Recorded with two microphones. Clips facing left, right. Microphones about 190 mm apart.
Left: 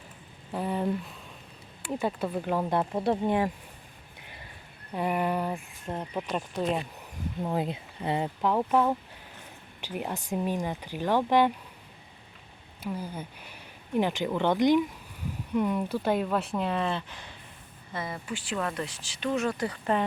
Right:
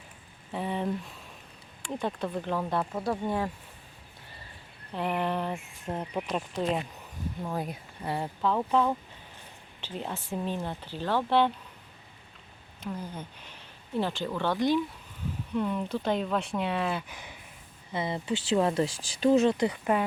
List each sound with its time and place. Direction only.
0.5 s speech: centre (ahead or behind); by 3.5 s 20° left (ahead or behind)
4.9 s speech: 10° left (ahead or behind)
5.8 s speech: 5° right (ahead or behind)
7.4 s speech: 25° left (ahead or behind)
12.8 s speech: 10° left (ahead or behind); by 17.3 s 10° right (ahead or behind)
17.9 s speech: 25° right (ahead or behind)